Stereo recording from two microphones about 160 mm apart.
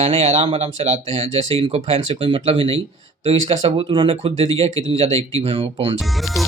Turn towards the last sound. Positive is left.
turn(degrees=0)  # may be behind; listen again after turning